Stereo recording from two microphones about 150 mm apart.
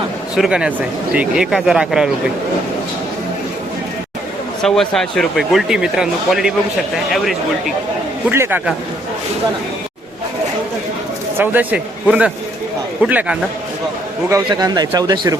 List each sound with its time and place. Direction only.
0.3 s speech: 5° right (ahead or behind)
4.6 s speech: 5° left (ahead or behind)
8.3 s speech: 15° right (ahead or behind)
11.3 s speech: 10° right (ahead or behind)
14.3 s speech: 25° right (ahead or behind)